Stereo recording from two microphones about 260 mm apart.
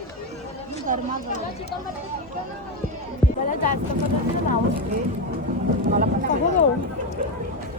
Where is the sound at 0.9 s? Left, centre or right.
Right.